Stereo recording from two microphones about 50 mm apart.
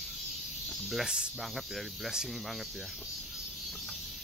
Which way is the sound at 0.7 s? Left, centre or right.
Centre.